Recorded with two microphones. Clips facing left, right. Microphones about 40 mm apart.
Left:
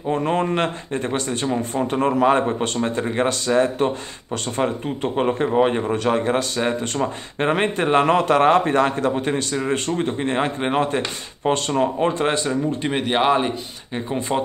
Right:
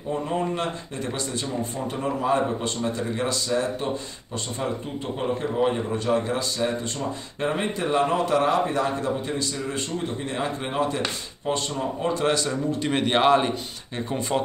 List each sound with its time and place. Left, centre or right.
0.1 s speech: left
0.9 s speech: left
13.0 s a man's voice: centre